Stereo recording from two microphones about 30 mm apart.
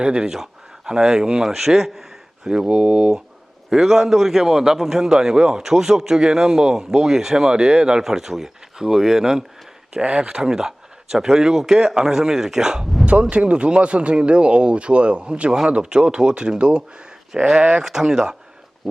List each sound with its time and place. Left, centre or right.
0.0 s speech: right
0.9 s speech: right
1.5 s speech: centre
2.5 s speech: right
3.7 s speech: centre
5.1 s speech: right
7.3 s speech: right
8.0 s speech: centre
10.0 s speech: right
10.2 s speech: right
13.3 s speech: right; by 18.3 s centre